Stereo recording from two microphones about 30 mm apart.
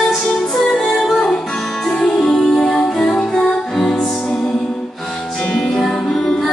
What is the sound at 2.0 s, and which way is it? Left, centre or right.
Music, left.